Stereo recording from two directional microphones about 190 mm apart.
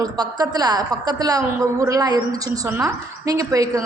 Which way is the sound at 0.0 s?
20° right (ahead or behind).